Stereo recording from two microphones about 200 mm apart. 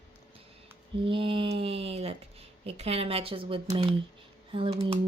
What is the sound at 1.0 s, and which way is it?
Speech, 25° right (ahead or behind).